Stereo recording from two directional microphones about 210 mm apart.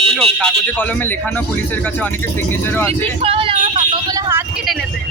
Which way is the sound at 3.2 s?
25° right (ahead or behind).